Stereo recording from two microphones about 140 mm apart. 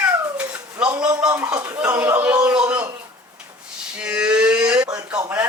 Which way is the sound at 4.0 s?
5° right (ahead or behind).